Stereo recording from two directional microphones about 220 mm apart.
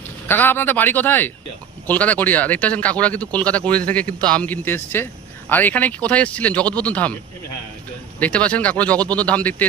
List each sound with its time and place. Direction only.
0.3 s speech: 10° left (ahead or behind)
8.2 s speech: 5° left (ahead or behind)